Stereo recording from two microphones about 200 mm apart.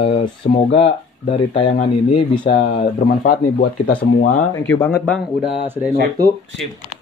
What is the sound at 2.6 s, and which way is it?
Speech, 40° left (ahead or behind).